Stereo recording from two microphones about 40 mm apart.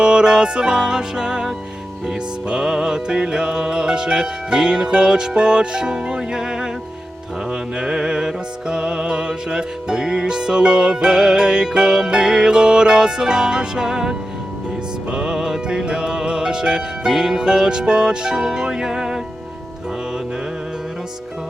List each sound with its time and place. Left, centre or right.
0.0 s music: right